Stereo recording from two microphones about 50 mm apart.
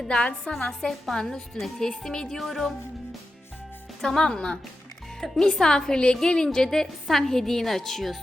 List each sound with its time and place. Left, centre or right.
0.0 s a woman's voice: centre
0.5 s a woman's voice: left
0.9 s a woman's voice: centre
2.4 s music: centre
4.0 s a woman's voice: centre
5.2 s music: centre
5.5 s a woman's voice: centre